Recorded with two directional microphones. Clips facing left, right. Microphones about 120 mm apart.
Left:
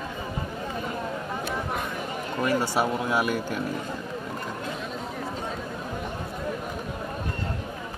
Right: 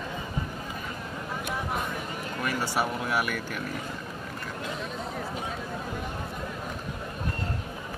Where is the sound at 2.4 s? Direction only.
15° left (ahead or behind).